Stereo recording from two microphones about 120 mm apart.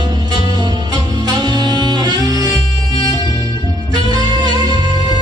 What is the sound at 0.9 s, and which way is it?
Music, 35° right (ahead or behind).